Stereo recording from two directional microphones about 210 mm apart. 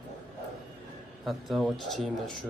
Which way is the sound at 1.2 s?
Centre (ahead or behind).